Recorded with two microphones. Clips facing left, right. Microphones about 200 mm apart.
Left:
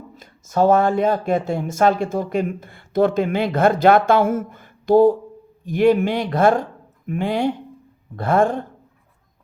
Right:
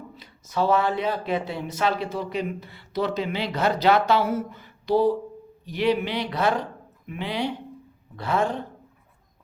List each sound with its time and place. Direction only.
0.2 s speech: 45° left (ahead or behind)